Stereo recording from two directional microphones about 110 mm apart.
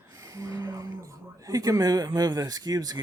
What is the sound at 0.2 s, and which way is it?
Speech, 30° right (ahead or behind).